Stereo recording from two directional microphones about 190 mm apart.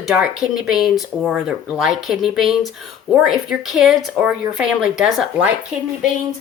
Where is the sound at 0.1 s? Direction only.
5° right (ahead or behind).